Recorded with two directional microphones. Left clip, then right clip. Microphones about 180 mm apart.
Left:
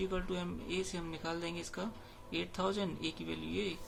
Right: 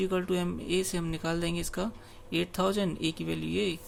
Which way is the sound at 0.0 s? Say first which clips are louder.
Right 8 dB; 45° right (ahead or behind).